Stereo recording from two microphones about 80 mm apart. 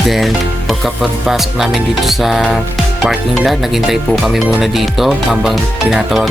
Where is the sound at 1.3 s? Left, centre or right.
Centre.